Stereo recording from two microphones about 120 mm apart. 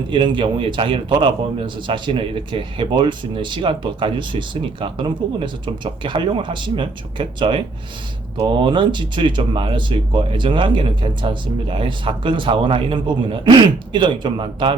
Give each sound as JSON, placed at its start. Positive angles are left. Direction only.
{"t": 0.1, "sound": "a man's voice", "side_deg": -45}